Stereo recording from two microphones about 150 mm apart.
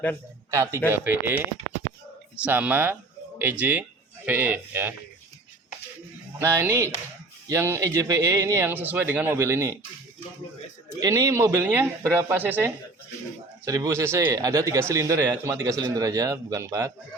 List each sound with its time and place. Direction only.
0.5 s speech: 20° right (ahead or behind)
6.4 s speech: 15° right (ahead or behind)
11.0 s speech: 20° right (ahead or behind)